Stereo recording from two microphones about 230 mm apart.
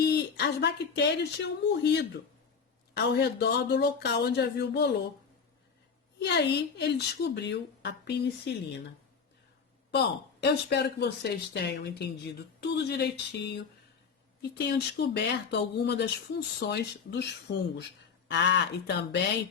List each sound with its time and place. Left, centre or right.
0.0 s speech: left
6.1 s speech: left
9.9 s speech: left